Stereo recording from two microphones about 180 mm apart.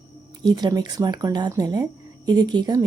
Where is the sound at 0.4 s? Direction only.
25° right (ahead or behind).